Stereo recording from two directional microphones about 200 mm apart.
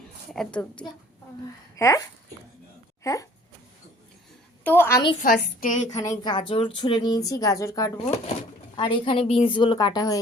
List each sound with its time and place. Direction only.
0.3 s a woman's voice: 5° left (ahead or behind)
1.7 s speech: 15° left (ahead or behind)
4.6 s speech: 10° left (ahead or behind)
5.2 s a woman's voice: 45° left (ahead or behind)
6.0 s a woman's voice: 20° left (ahead or behind)